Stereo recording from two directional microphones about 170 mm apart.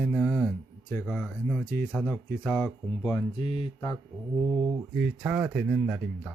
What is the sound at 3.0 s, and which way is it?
Speech, 25° left (ahead or behind).